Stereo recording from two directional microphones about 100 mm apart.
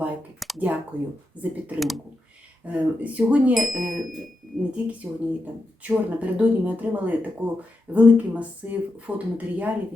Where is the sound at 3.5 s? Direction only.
Centre (ahead or behind).